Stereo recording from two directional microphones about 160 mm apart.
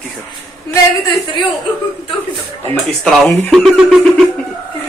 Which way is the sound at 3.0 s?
Centre (ahead or behind).